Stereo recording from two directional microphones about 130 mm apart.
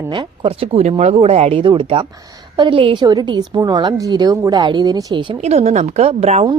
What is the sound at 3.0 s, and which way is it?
A woman's voice, 30° right (ahead or behind).